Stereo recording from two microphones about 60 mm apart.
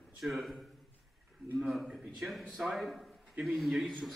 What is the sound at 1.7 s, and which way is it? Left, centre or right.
A man's voice, centre.